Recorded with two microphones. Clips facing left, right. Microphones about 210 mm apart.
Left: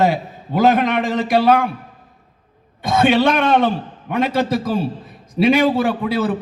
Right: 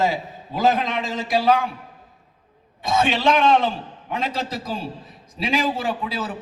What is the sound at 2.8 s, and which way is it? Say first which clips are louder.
A man's voice: left 7 dB; 65° left (ahead or behind).